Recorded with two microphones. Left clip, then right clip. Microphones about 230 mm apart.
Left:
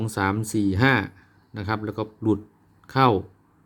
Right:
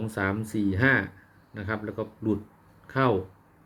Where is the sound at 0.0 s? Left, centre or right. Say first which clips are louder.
Left 4 dB; left.